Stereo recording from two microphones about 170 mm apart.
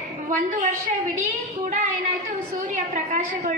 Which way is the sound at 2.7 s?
45° right (ahead or behind).